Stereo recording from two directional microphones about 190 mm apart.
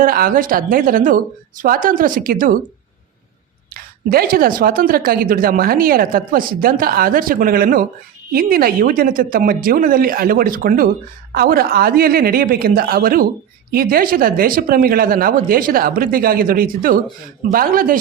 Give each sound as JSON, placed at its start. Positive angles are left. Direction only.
{"t": 0.0, "sound": "a woman's voice", "side_deg": -50}
{"t": 3.8, "sound": "a woman's voice", "side_deg": -50}